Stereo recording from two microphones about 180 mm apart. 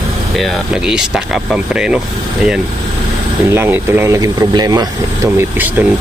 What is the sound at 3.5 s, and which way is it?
Speech, 10° right (ahead or behind).